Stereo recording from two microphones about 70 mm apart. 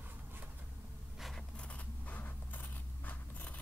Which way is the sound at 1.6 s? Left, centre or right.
Centre.